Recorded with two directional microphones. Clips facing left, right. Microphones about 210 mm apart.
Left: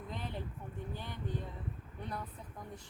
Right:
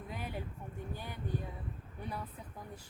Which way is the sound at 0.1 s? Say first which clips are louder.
Right 1 dB; 10° right (ahead or behind).